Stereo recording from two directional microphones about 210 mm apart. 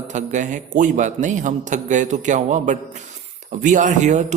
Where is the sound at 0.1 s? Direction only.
35° right (ahead or behind).